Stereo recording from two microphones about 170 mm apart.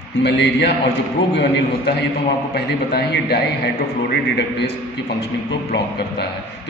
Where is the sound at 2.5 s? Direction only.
70° left (ahead or behind).